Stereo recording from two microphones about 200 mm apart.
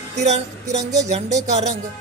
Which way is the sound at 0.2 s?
35° right (ahead or behind).